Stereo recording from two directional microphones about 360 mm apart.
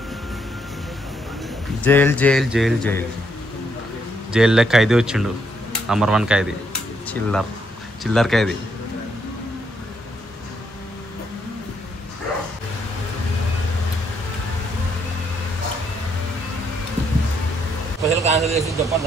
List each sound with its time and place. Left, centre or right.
1.8 s speech: centre
4.3 s speech: centre
18.0 s vehicle: centre